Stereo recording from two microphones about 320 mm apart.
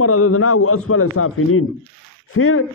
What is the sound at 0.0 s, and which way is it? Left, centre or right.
A man's voice, left.